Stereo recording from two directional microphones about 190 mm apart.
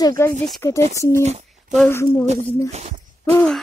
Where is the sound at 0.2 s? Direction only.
15° left (ahead or behind).